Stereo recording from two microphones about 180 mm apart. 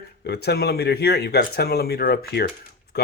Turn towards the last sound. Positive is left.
turn(degrees=60)  # may be behind; listen again after turning